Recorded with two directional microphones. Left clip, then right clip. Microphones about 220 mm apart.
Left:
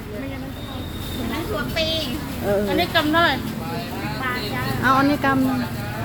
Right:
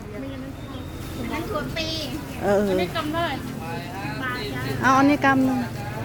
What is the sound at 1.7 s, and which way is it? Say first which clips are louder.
Speech: left 6 dB; 35° right (ahead or behind).